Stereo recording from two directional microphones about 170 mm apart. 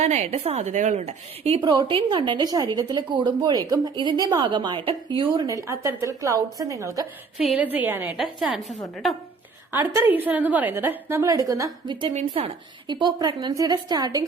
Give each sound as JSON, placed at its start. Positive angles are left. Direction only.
{"t": 0.0, "sound": "a woman's voice", "side_deg": -40}
{"t": 7.3, "sound": "a woman's voice", "side_deg": -5}
{"t": 9.7, "sound": "a woman's voice", "side_deg": -15}